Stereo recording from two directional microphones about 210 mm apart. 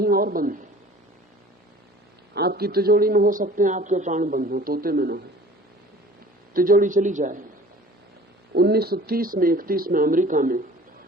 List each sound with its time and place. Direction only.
0.0 s a woman's voice: 45° right (ahead or behind)
2.3 s speech: 50° right (ahead or behind)
6.5 s a man's voice: 40° right (ahead or behind)
8.5 s speech: 50° right (ahead or behind)